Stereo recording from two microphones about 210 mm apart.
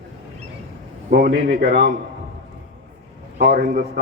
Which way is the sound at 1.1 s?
50° right (ahead or behind).